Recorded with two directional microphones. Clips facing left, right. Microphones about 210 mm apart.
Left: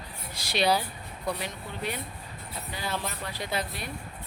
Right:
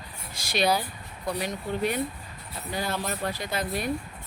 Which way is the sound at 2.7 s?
45° right (ahead or behind).